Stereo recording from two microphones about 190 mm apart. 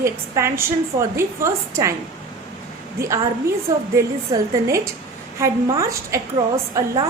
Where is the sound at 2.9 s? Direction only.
15° right (ahead or behind).